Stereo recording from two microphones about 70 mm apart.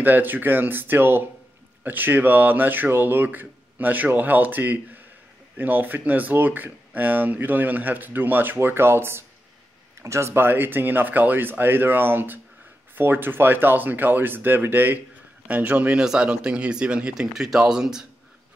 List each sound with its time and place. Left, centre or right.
0.0 s speech: right
16.0 s speech: centre